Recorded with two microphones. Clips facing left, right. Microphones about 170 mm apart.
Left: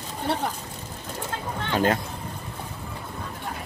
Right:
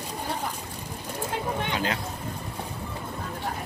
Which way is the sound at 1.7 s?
50° left (ahead or behind).